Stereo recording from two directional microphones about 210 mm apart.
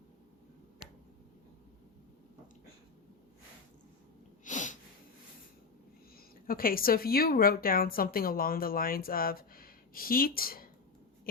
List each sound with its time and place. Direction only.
4.4 s sniff: 35° left (ahead or behind)
6.1 s speech: 45° left (ahead or behind)